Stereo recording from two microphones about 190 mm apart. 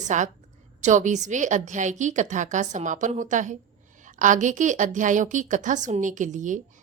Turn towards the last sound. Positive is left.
turn(degrees=-40)  # may be behind; listen again after turning